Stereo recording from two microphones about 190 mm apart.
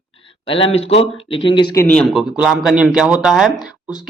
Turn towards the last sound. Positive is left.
turn(degrees=-5)  # may be behind; listen again after turning